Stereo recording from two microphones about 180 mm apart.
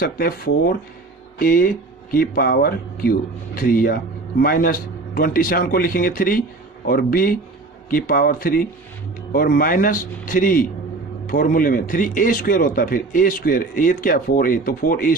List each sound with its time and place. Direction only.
0.0 s speech: 55° left (ahead or behind)